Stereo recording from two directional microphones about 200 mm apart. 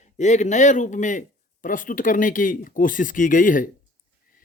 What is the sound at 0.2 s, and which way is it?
A man's voice, 35° left (ahead or behind).